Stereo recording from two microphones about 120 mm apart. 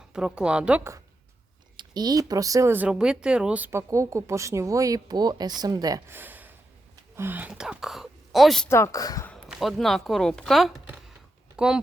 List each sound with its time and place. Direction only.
0.1 s speech: 5° right (ahead or behind)
1.7 s speech: 40° right (ahead or behind); by 2.9 s 20° right (ahead or behind)
2.9 s speech: 5° right (ahead or behind); by 6.0 s 30° right (ahead or behind)
6.1 s a sound: 15° right (ahead or behind)
7.2 s speech: 15° right (ahead or behind); by 8.7 s centre (ahead or behind)
8.7 s speech: 25° left (ahead or behind)
9.5 s speech: centre (ahead or behind)